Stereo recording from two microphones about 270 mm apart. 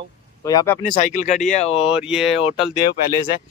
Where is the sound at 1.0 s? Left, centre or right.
Left.